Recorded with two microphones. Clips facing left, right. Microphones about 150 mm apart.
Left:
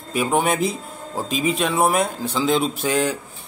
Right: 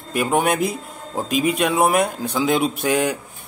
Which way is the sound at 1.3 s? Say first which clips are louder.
Right 2 dB; 55° right (ahead or behind).